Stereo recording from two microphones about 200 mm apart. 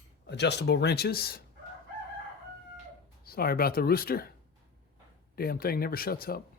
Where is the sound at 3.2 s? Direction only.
50° left (ahead or behind).